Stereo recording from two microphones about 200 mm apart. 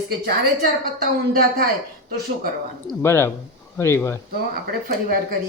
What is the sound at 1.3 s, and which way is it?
Speech, 50° right (ahead or behind).